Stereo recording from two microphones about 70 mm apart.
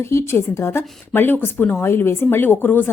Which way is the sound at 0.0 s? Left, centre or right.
Left.